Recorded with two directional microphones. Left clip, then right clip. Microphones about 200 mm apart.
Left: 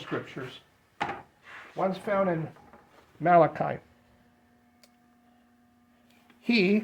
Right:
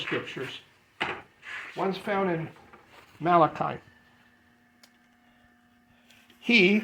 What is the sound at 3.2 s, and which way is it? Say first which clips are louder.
Speech: left 1 dB; 25° left (ahead or behind).